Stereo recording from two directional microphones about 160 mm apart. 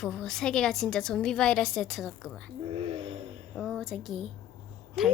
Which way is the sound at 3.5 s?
Centre (ahead or behind).